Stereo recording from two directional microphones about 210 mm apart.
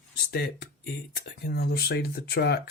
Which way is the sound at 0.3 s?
50° left (ahead or behind).